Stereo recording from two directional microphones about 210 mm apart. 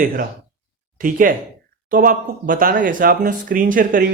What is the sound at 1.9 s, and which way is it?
A man's voice, 40° right (ahead or behind).